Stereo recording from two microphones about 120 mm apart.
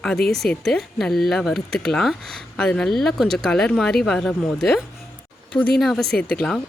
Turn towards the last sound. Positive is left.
turn(degrees=5)  # may be behind; listen again after turning